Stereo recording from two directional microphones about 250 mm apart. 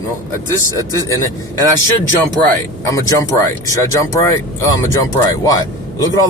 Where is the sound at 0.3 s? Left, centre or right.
Centre.